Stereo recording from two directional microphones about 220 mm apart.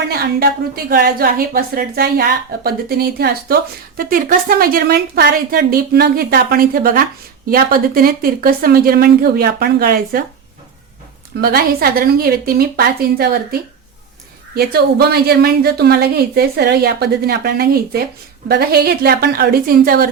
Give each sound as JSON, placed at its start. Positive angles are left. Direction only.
{"t": 0.1, "sound": "a sound", "side_deg": -45}
{"t": 0.9, "sound": "a woman's voice", "side_deg": -40}
{"t": 11.3, "sound": "a woman's voice", "side_deg": -45}